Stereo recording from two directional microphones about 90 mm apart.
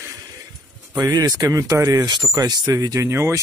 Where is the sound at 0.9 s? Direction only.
45° right (ahead or behind).